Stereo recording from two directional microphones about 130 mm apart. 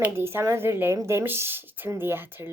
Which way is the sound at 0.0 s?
20° right (ahead or behind).